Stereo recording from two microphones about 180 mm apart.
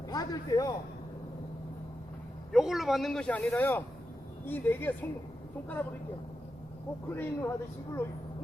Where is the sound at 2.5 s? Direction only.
Centre (ahead or behind).